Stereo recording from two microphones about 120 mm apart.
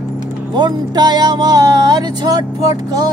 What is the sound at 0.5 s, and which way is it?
Speech, 35° right (ahead or behind).